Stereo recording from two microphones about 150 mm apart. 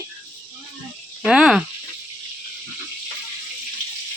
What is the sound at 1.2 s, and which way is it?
Speech, 5° right (ahead or behind).